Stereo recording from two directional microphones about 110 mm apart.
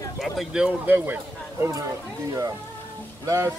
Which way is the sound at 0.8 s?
15° right (ahead or behind).